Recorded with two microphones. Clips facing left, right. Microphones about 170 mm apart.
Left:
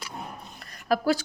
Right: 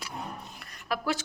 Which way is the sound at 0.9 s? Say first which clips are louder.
Left 7 dB; 35° left (ahead or behind).